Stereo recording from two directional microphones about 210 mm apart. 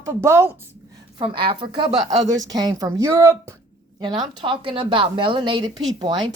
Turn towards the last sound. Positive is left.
turn(degrees=-20)  # may be behind; listen again after turning